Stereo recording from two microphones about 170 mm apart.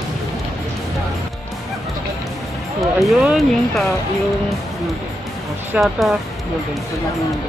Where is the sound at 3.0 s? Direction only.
Centre (ahead or behind).